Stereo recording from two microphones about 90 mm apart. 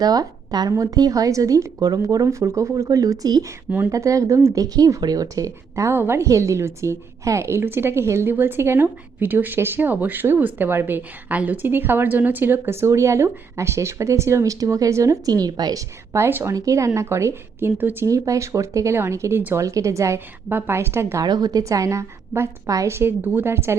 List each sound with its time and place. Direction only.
0.0 s a woman's voice: 45° right (ahead or behind)
16.1 s a woman's voice: 30° right (ahead or behind)
18.0 s speech: 35° right (ahead or behind)
20.5 s a woman's voice: 25° right (ahead or behind)
21.2 s speech: 45° right (ahead or behind); by 23.7 s 30° right (ahead or behind)